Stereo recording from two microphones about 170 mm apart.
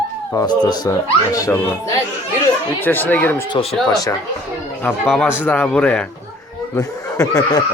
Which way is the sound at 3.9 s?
20° left (ahead or behind).